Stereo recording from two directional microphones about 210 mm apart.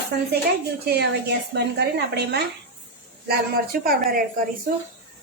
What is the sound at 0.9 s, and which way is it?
A woman's voice, 50° right (ahead or behind).